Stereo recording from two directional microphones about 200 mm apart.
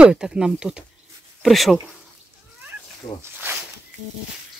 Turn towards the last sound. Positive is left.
turn(degrees=25)  # may be behind; listen again after turning